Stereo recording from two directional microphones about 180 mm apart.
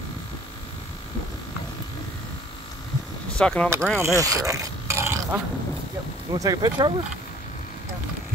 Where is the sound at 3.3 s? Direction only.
5° left (ahead or behind).